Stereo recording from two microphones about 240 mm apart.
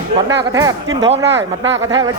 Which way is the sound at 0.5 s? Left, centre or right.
Centre.